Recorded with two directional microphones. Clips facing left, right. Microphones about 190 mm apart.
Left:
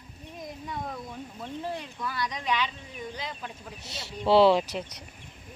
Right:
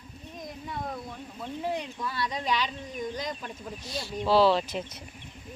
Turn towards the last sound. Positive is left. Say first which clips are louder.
# left 2 dB
turn(degrees=20)  # may be behind; listen again after turning